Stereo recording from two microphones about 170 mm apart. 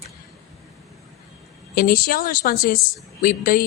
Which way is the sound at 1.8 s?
60° left (ahead or behind).